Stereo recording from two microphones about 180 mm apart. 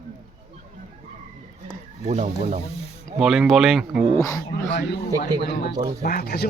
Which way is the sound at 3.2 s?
Centre (ahead or behind).